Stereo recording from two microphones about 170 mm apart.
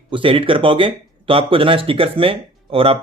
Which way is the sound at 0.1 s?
30° right (ahead or behind).